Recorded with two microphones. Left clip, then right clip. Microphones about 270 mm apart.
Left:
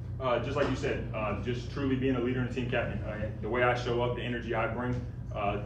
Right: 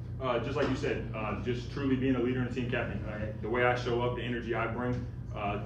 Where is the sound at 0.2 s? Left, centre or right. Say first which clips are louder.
Left 2 dB; centre.